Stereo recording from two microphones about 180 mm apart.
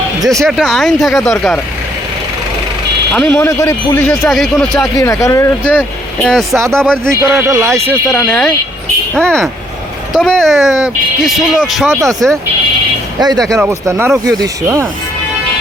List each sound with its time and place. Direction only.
0.2 s speech: 20° right (ahead or behind)
0.4 s speech: centre (ahead or behind)
3.1 s speech: 5° left (ahead or behind)
4.9 s speech: 15° left (ahead or behind)
6.2 s speech: centre (ahead or behind)
7.2 s speech: 15° right (ahead or behind)
8.0 s speech: 10° left (ahead or behind)
13.1 s speech: 20° right (ahead or behind)